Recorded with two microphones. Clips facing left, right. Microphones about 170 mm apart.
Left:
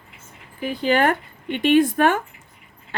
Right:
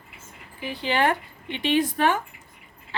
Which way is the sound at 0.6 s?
50° left (ahead or behind).